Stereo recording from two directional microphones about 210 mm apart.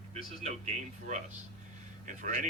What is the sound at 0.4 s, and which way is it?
Speech, 30° right (ahead or behind).